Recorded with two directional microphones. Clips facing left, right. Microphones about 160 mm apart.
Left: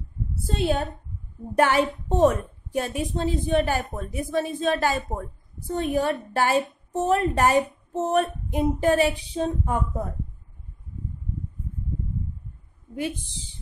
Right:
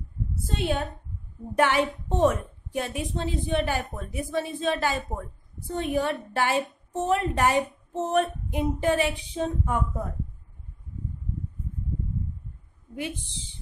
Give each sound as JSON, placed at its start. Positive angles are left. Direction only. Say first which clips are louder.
{"t": 0.6, "sound": "a woman's voice", "louder": "left 3 dB", "side_deg": 35}